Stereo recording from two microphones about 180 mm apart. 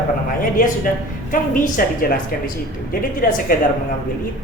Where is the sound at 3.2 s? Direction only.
50° left (ahead or behind).